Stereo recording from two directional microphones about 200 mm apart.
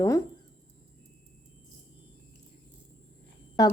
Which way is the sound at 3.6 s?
20° left (ahead or behind).